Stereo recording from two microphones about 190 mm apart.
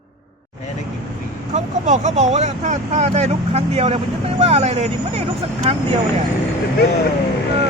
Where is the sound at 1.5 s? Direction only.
40° right (ahead or behind).